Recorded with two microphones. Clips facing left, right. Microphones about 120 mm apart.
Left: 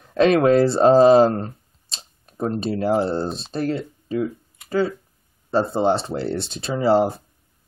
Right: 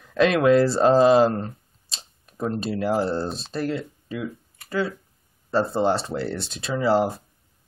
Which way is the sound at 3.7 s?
35° left (ahead or behind).